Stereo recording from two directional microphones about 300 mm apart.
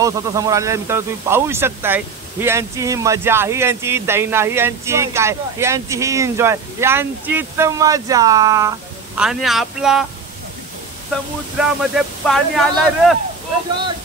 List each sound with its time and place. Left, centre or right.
0.0 s speech: centre
11.5 s speech: centre